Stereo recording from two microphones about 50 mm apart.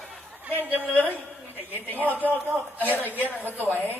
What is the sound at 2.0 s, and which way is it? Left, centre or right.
Speech, right.